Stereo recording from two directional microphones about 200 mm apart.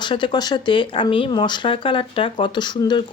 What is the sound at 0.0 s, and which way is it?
A woman's voice, 25° left (ahead or behind).